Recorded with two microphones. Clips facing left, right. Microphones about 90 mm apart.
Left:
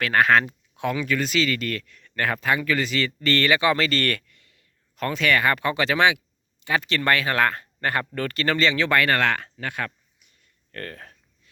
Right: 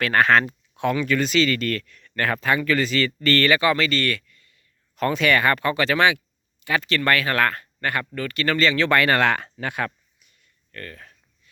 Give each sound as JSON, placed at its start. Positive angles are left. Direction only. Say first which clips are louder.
{"t": 0.0, "sound": "speech", "louder": "right 1 dB", "side_deg": 5}
{"t": 3.8, "sound": "speech", "louder": "right 1 dB", "side_deg": 40}
{"t": 4.3, "sound": "a sound", "louder": "right 1 dB", "side_deg": 80}
{"t": 4.9, "sound": "speech", "louder": "right 2 dB", "side_deg": -5}
{"t": 5.6, "sound": "speech", "louder": "right 1 dB", "side_deg": 15}
{"t": 8.1, "sound": "speech", "louder": "left 1 dB", "side_deg": 50}
{"t": 8.4, "sound": "speech", "louder": "right 2 dB", "side_deg": 25}
{"t": 8.8, "sound": "speech", "louder": "right 2 dB", "side_deg": 0}
{"t": 9.0, "sound": "speech", "louder": "right 2 dB", "side_deg": -15}
{"t": 10.4, "sound": "a sound", "louder": "left 2 dB", "side_deg": 60}